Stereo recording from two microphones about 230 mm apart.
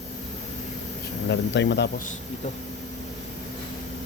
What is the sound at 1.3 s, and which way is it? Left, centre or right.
Speech, left.